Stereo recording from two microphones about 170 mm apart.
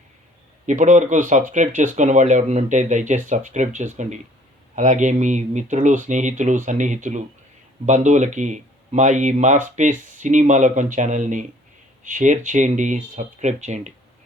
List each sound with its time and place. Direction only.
0.7 s speech: 45° right (ahead or behind)